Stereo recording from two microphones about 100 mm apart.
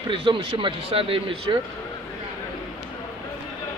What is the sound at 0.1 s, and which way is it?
Speech, 60° right (ahead or behind).